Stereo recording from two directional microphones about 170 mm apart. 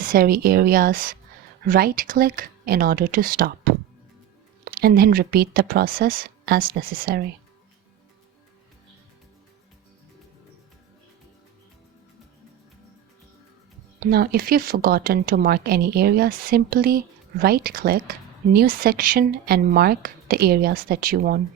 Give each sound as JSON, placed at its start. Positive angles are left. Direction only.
{"t": 0.0, "sound": "speech", "side_deg": -55}
{"t": 14.0, "sound": "speech", "side_deg": -65}